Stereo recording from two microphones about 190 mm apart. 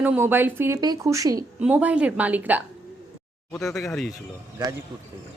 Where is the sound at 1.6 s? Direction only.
5° right (ahead or behind).